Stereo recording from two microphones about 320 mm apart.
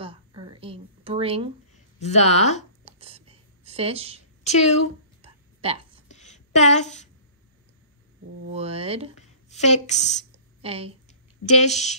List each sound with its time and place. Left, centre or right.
0.0 s a sound: centre
2.0 s speech: left
2.8 s whispering: centre
4.5 s speech: left
5.2 s a sound: centre
6.0 s a sound: left
8.5 s speech: centre
9.1 s a woman's voice: left
10.6 s speech: centre
11.4 s speech: left